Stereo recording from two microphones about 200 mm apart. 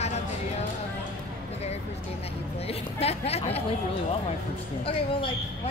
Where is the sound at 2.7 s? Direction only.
30° left (ahead or behind).